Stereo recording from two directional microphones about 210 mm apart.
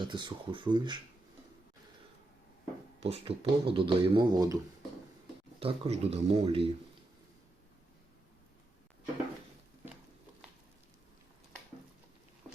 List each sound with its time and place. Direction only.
0.0 s speech: 20° right (ahead or behind)
3.0 s speech: 30° right (ahead or behind)
5.5 s speech: 25° right (ahead or behind)